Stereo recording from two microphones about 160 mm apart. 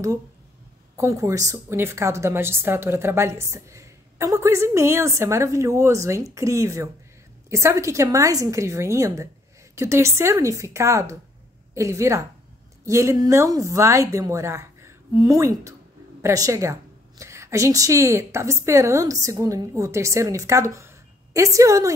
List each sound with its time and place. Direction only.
0.9 s a woman's voice: 20° right (ahead or behind)